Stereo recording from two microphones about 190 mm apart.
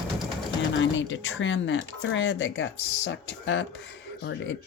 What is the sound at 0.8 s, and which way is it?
Speech, 75° left (ahead or behind).